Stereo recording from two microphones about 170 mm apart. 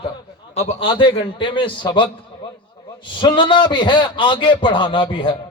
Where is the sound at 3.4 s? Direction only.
30° left (ahead or behind).